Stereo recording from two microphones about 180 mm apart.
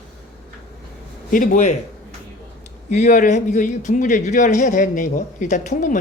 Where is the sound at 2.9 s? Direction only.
45° left (ahead or behind).